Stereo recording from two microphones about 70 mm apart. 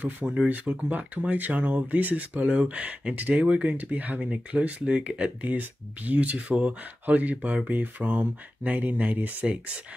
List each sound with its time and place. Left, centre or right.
0.5 s speech: right